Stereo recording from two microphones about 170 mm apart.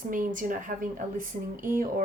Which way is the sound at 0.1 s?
50° right (ahead or behind).